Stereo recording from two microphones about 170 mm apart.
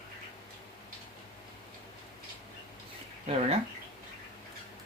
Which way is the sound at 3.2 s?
35° right (ahead or behind).